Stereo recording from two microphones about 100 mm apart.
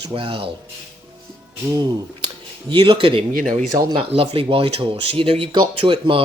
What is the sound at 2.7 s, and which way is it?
Speech, 55° right (ahead or behind).